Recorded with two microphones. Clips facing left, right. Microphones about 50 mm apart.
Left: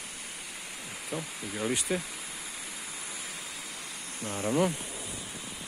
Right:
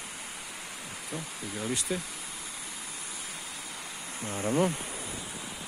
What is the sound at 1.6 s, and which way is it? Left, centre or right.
Speech, centre.